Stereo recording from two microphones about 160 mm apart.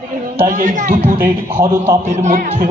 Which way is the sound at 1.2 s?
15° right (ahead or behind).